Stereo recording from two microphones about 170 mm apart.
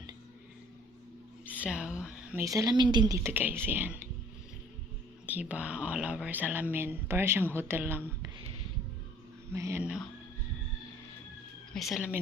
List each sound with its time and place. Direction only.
1.5 s a sound: 10° right (ahead or behind)
2.4 s speech: 20° right (ahead or behind)
5.2 s speech: 10° right (ahead or behind)
9.5 s speech: 15° right (ahead or behind)
11.7 s speech: centre (ahead or behind)